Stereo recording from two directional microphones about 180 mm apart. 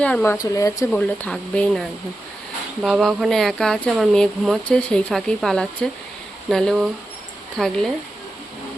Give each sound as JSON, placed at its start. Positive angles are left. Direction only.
{"t": 0.0, "sound": "speech", "side_deg": 5}
{"t": 0.3, "sound": "speech", "side_deg": 20}
{"t": 0.9, "sound": "speech", "side_deg": 5}
{"t": 2.8, "sound": "speech", "side_deg": 0}